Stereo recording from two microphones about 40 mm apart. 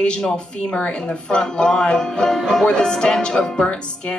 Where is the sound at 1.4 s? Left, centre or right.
Centre.